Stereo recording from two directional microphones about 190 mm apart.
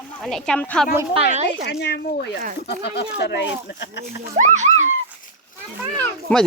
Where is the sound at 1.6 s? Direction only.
60° left (ahead or behind).